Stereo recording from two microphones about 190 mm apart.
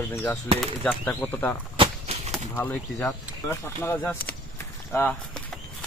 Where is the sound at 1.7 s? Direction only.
35° right (ahead or behind).